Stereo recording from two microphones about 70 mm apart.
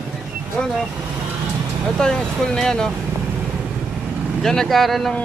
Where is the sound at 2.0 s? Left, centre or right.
Centre.